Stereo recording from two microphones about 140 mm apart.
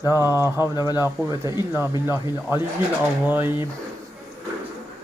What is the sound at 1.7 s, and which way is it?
Speech, 15° right (ahead or behind).